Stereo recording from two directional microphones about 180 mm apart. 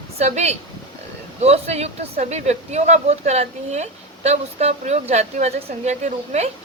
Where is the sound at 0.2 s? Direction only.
40° right (ahead or behind).